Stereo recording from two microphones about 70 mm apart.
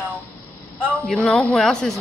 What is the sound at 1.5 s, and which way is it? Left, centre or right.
Speech, centre.